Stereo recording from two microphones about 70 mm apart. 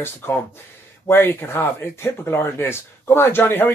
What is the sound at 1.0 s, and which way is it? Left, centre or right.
Speech, left.